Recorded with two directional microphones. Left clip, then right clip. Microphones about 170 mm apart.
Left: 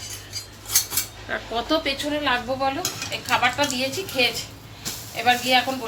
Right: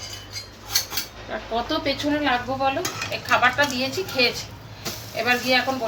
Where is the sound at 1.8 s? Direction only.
Centre (ahead or behind).